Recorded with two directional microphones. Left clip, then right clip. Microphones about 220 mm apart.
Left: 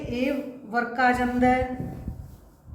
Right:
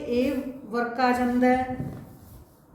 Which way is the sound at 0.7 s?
20° left (ahead or behind).